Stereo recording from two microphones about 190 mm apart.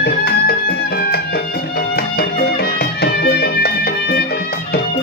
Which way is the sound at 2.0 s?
55° left (ahead or behind).